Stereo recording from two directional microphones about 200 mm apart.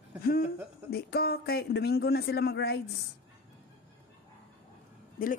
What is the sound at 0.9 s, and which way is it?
A man's voice, 50° left (ahead or behind).